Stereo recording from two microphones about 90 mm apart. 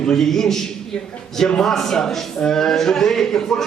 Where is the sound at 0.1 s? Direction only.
5° left (ahead or behind).